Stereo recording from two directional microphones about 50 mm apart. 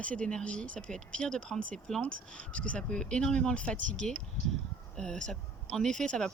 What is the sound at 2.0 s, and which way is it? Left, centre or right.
Speech, left.